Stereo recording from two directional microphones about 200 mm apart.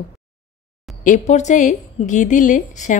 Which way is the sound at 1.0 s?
35° left (ahead or behind).